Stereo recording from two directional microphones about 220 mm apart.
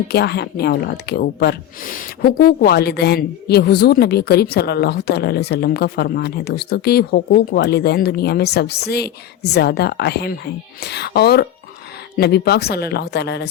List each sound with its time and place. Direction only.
0.1 s speech: 50° left (ahead or behind)